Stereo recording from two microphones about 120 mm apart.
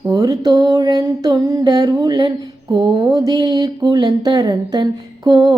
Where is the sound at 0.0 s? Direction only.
25° right (ahead or behind).